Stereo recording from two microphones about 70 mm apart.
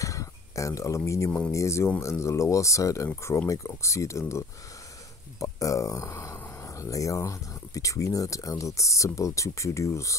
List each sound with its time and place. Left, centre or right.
0.0 s a sound: left
1.5 s speech: left
5.4 s speech: left